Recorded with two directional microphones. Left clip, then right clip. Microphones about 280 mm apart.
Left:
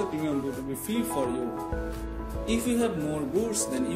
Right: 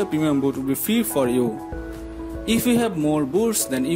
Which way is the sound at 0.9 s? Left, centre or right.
Right.